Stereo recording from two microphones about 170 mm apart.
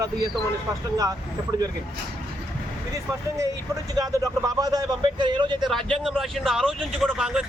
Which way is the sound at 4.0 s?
20° right (ahead or behind).